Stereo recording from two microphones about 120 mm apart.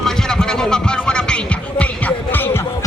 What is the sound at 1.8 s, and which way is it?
Music, 15° left (ahead or behind).